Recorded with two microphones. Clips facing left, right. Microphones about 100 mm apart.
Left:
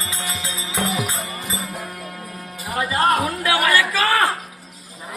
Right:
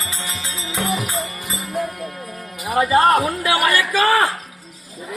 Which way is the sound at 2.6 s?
15° right (ahead or behind).